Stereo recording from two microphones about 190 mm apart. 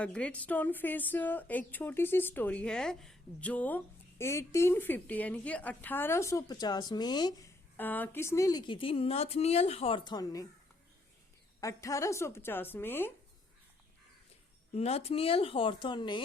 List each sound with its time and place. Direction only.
0.0 s speech: 5° left (ahead or behind)
7.8 s speech: 10° left (ahead or behind)
11.6 s speech: 15° left (ahead or behind)
14.7 s speech: 35° left (ahead or behind)